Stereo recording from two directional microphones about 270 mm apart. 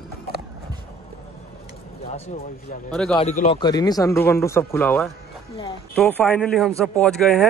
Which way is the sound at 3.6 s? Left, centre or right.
Centre.